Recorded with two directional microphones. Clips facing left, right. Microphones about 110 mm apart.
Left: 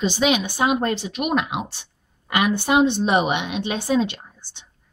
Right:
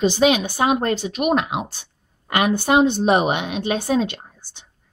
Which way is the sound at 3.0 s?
45° right (ahead or behind).